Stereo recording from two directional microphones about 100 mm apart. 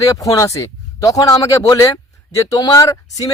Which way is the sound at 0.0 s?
35° left (ahead or behind).